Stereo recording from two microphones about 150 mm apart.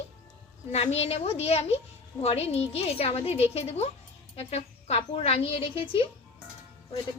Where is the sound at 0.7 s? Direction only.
45° left (ahead or behind).